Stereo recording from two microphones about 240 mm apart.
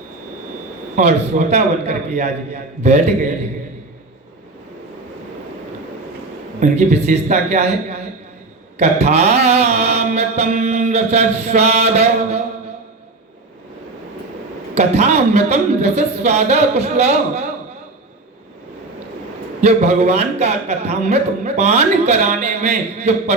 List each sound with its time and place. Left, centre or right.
0.9 s speech: right
6.6 s speech: right
14.8 s speech: right
19.6 s speech: right